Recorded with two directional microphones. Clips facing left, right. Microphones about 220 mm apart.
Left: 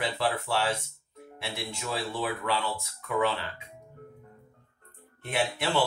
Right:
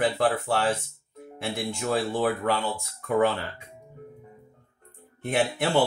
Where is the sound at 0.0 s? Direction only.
50° right (ahead or behind).